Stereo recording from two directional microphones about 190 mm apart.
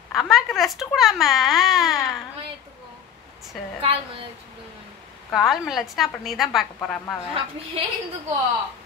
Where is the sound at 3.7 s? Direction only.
30° right (ahead or behind).